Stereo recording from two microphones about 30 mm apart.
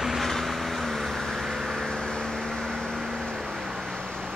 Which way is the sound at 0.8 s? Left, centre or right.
Centre.